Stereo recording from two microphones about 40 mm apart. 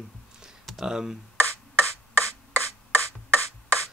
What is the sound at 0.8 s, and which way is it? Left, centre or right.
Speech, centre.